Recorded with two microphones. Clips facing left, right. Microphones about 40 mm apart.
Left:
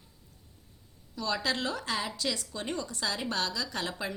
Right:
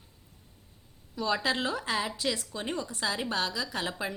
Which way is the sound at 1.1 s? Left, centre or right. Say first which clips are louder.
Right 2 dB; centre.